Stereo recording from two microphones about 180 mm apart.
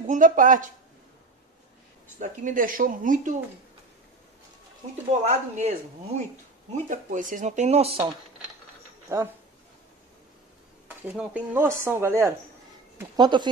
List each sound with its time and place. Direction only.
0.0 s speech: 45° right (ahead or behind)
2.1 s speech: 45° right (ahead or behind)
5.2 s speech: 40° right (ahead or behind)
10.9 s speech: 10° right (ahead or behind)